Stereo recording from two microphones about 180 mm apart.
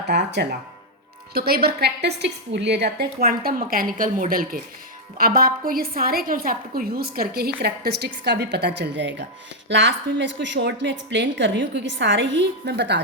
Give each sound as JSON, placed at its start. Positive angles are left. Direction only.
{"t": 0.1, "sound": "a woman's voice", "side_deg": -70}
{"t": 1.3, "sound": "a woman's voice", "side_deg": -60}